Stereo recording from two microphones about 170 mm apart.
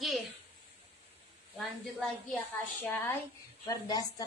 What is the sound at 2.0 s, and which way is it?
A woman's voice, 10° left (ahead or behind).